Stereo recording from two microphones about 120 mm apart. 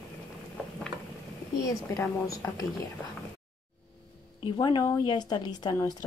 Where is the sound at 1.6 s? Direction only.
25° left (ahead or behind).